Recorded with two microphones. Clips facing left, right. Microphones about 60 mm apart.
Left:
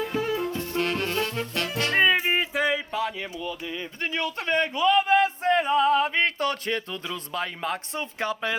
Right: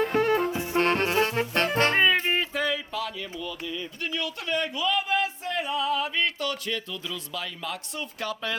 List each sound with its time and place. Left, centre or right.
0.0 s music: right
0.5 s music: centre
0.8 s music: right
2.0 s a sound: centre; by 8.5 s left